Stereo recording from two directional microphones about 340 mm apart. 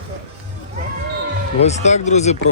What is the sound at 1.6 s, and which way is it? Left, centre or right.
Speech, centre.